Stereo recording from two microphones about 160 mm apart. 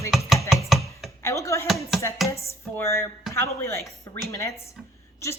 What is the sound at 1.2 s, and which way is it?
Speech, 20° left (ahead or behind).